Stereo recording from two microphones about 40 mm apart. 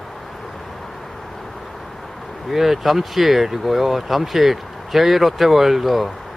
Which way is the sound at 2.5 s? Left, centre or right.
Centre.